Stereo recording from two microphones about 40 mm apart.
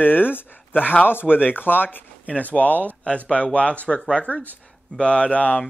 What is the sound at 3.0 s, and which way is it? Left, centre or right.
Speech, left.